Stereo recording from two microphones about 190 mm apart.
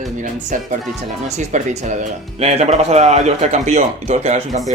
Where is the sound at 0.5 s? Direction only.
45° right (ahead or behind).